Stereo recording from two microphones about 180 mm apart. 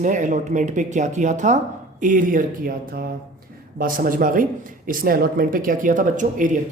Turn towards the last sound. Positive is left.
turn(degrees=-45)  # may be behind; listen again after turning